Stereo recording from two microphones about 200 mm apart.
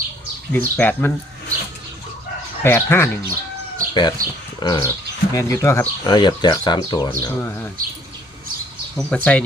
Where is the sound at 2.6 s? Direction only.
10° left (ahead or behind).